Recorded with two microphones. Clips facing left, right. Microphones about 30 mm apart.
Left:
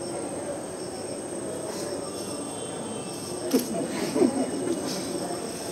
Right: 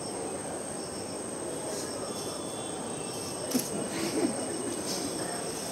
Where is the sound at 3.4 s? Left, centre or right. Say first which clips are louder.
Left 7 dB; centre.